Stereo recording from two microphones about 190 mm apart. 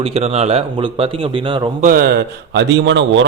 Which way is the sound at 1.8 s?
50° right (ahead or behind).